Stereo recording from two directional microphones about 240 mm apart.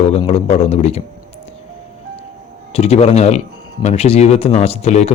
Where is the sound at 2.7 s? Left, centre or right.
Left.